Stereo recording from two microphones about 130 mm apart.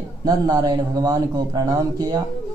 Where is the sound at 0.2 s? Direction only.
30° right (ahead or behind).